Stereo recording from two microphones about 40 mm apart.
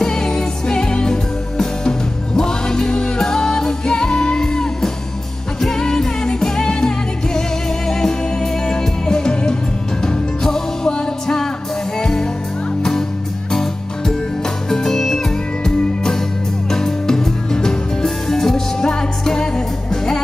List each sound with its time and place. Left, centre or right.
0.0 s music: centre
8.6 s music: centre
13.5 s music: centre